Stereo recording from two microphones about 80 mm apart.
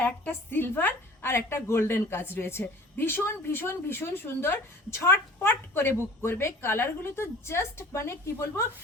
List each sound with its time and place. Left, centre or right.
0.0 s a woman's voice: left